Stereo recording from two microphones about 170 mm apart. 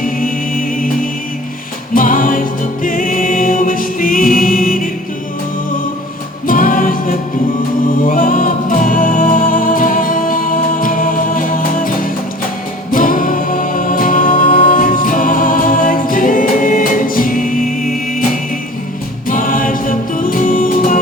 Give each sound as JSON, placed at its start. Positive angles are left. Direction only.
{"t": 1.9, "sound": "music", "side_deg": 55}
{"t": 6.5, "sound": "music", "side_deg": 55}
{"t": 19.3, "sound": "music", "side_deg": 50}